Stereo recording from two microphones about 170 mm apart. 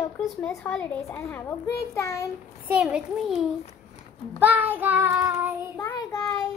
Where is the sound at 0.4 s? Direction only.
5° left (ahead or behind).